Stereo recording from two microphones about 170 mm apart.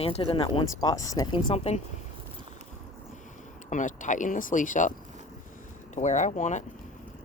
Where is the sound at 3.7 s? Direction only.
45° left (ahead or behind).